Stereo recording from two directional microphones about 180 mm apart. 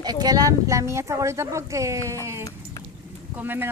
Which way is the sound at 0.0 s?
20° right (ahead or behind).